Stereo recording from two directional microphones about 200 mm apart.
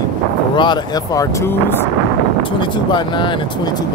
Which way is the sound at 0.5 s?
20° left (ahead or behind).